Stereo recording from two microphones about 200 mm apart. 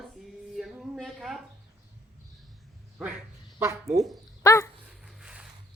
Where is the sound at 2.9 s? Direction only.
5° right (ahead or behind).